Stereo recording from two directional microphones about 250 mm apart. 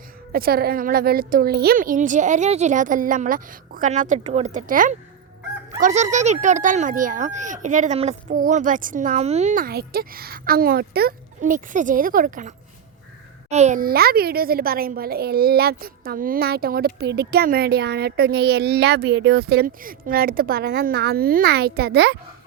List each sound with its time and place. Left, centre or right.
0.3 s a child's voice: right